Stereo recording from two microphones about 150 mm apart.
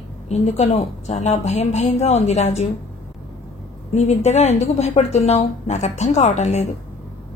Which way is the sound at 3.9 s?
50° left (ahead or behind).